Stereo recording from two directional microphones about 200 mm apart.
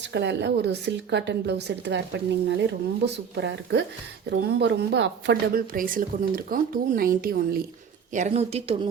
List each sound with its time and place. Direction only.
0.1 s speech: 60° right (ahead or behind)
5.7 s speech: 45° right (ahead or behind)
8.1 s a woman's voice: 35° right (ahead or behind)